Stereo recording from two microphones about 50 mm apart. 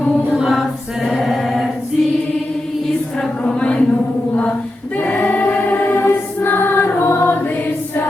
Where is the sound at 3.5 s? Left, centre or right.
Centre.